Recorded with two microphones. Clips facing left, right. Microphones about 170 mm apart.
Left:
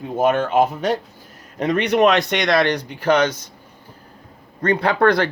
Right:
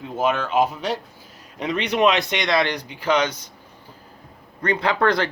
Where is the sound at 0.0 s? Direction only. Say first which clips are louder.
Left 4 dB; 50° left (ahead or behind).